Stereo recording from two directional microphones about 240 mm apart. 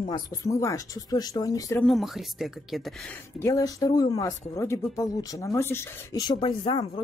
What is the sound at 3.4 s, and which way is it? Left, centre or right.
Speech, centre.